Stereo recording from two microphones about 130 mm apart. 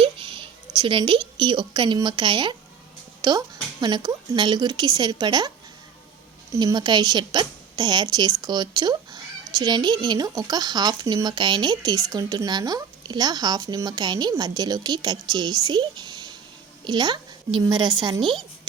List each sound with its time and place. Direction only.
0.0 s a woman's voice: 45° right (ahead or behind)
6.6 s speech: 35° right (ahead or behind)